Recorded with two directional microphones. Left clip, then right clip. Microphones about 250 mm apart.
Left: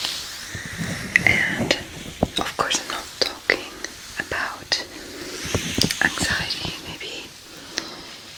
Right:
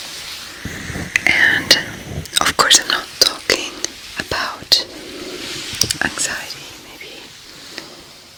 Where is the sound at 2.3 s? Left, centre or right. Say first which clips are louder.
Right 13 dB; right.